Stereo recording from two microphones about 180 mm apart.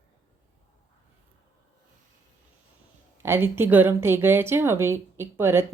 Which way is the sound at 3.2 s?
10° right (ahead or behind).